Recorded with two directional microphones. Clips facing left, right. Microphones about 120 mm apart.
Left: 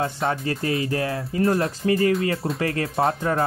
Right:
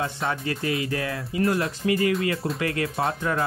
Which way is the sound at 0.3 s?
35° left (ahead or behind).